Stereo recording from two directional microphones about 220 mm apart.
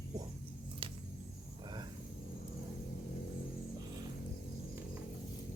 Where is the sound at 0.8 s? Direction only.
25° right (ahead or behind).